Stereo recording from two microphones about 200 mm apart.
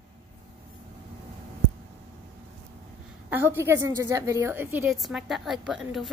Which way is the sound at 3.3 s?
10° right (ahead or behind).